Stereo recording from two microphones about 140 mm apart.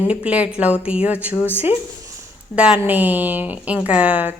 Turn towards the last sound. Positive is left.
turn(degrees=-10)  # may be behind; listen again after turning